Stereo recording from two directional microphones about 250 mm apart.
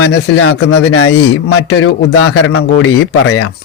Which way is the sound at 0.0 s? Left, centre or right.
Left.